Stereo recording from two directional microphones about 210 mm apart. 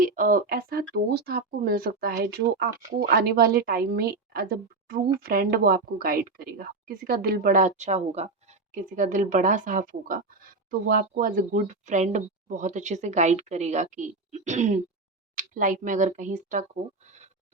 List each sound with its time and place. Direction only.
0.0 s a woman's voice: 40° right (ahead or behind)